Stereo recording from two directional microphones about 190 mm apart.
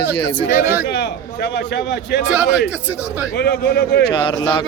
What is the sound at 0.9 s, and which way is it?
A man's voice, 65° left (ahead or behind).